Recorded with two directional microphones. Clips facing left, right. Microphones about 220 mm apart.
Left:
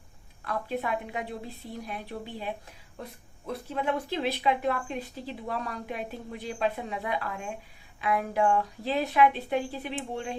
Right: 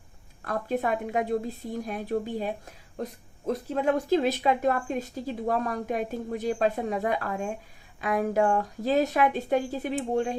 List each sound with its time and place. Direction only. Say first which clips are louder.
0.4 s speech: right 4 dB; 45° right (ahead or behind)